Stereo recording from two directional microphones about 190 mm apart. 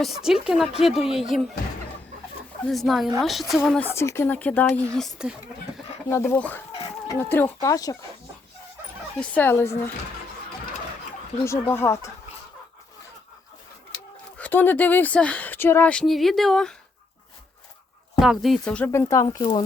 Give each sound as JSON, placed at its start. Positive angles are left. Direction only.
{"t": 0.0, "sound": "speech", "side_deg": 0}
{"t": 2.6, "sound": "speech", "side_deg": 0}
{"t": 6.1, "sound": "speech", "side_deg": 15}
{"t": 9.1, "sound": "speech", "side_deg": 5}
{"t": 11.4, "sound": "speech", "side_deg": 15}
{"t": 14.3, "sound": "speech", "side_deg": 10}
{"t": 18.2, "sound": "speech", "side_deg": 0}